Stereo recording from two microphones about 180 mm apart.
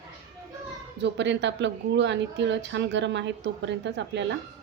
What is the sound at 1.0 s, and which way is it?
A woman's voice, 80° right.